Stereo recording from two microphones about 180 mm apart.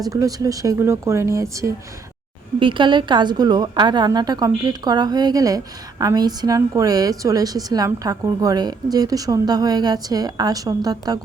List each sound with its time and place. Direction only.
0.0 s speech: 20° right (ahead or behind)
2.6 s a woman's voice: 30° right (ahead or behind)